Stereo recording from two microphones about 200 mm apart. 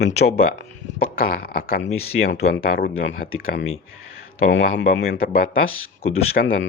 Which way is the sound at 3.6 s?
90° left.